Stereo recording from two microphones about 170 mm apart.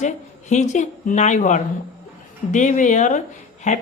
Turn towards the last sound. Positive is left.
turn(degrees=45)  # may be behind; listen again after turning